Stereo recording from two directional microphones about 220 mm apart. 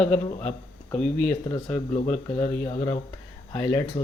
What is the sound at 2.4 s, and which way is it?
Speech, 25° left (ahead or behind).